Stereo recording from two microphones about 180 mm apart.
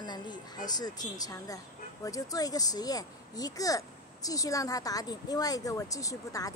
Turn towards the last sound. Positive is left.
turn(degrees=20)  # may be behind; listen again after turning